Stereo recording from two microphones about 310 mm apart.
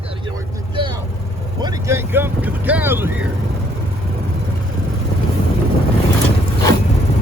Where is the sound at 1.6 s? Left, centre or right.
Centre.